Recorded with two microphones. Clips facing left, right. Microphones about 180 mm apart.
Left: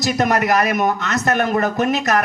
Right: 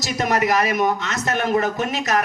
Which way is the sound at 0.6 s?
50° left (ahead or behind).